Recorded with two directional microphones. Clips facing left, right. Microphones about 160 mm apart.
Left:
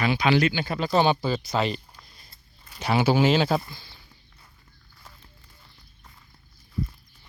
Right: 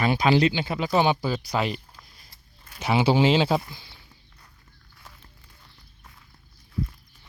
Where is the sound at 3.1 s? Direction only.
25° right (ahead or behind).